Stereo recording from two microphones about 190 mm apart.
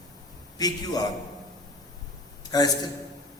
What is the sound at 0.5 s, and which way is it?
Speech, 20° left (ahead or behind).